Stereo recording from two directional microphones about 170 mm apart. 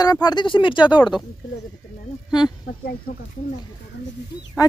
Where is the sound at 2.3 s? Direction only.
25° left (ahead or behind).